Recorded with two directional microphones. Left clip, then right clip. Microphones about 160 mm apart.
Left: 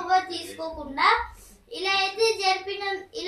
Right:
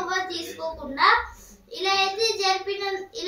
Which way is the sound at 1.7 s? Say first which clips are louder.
Right 2 dB; 20° left (ahead or behind).